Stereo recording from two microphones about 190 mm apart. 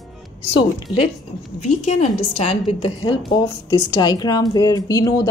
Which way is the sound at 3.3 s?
20° left (ahead or behind).